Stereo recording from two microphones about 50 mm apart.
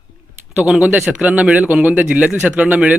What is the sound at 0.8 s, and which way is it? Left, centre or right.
Speech, right.